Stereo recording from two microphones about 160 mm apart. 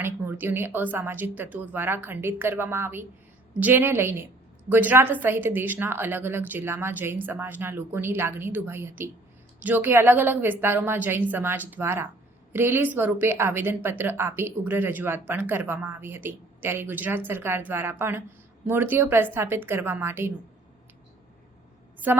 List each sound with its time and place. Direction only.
0.0 s speech: 15° right (ahead or behind)